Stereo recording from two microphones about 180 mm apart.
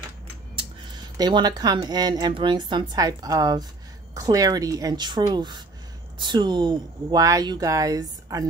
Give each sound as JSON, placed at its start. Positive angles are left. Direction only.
{"t": 0.6, "sound": "speech", "side_deg": -25}